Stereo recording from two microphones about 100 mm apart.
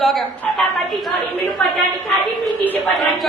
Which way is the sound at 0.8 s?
20° left (ahead or behind).